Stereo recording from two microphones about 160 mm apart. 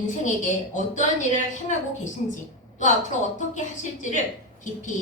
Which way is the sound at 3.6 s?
50° left (ahead or behind).